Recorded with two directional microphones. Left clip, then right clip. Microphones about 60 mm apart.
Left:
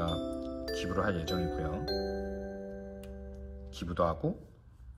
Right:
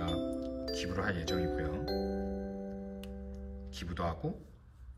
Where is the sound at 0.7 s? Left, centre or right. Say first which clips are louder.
Left 4 dB; right.